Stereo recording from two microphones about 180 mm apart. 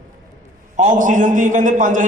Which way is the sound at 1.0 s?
45° right (ahead or behind).